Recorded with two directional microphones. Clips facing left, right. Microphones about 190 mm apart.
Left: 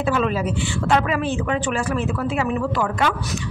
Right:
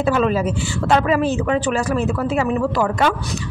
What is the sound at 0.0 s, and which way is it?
Speech, 40° right (ahead or behind).